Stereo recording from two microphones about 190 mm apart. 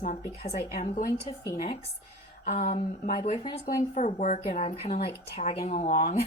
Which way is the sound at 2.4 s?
40° left (ahead or behind).